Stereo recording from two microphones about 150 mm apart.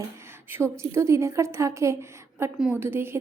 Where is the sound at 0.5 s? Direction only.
20° right (ahead or behind).